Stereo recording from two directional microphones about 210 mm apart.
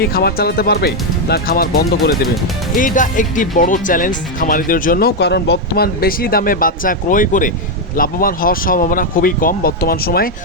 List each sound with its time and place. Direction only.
0.0 s speech: 50° left (ahead or behind)